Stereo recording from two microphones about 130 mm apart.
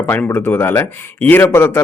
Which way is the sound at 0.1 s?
15° left (ahead or behind).